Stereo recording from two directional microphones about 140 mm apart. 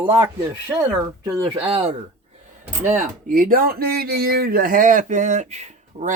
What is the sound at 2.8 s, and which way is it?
Speech, 65° right (ahead or behind).